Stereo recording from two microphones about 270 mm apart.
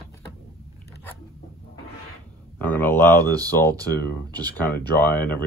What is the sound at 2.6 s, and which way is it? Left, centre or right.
Speech, centre.